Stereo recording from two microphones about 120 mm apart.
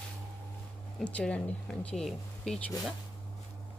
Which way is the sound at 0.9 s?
10° left (ahead or behind).